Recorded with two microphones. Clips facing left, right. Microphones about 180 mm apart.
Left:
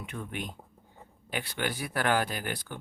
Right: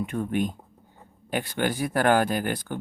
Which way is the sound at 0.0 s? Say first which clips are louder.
Right 11 dB; 45° right (ahead or behind).